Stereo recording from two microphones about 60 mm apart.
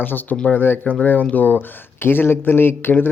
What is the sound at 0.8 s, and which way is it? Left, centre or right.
Speech, left.